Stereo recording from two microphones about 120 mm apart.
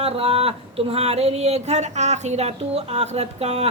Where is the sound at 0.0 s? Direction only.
55° right (ahead or behind).